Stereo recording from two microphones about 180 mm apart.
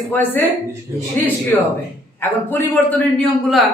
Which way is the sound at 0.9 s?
15° right (ahead or behind).